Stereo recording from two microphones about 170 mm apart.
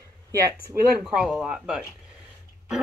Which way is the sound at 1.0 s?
5° right (ahead or behind).